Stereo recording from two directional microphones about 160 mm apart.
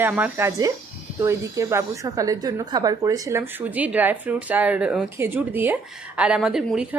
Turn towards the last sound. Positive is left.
turn(degrees=-5)  # may be behind; listen again after turning